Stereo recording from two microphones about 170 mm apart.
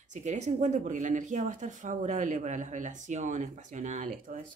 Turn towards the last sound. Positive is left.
turn(degrees=-50)  # may be behind; listen again after turning